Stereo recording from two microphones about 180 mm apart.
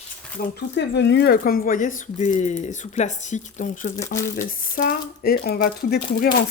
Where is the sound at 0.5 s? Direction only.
75° left (ahead or behind); by 4.0 s 40° left (ahead or behind).